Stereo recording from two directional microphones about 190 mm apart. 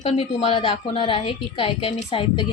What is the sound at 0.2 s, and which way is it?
A woman's voice, 30° left (ahead or behind).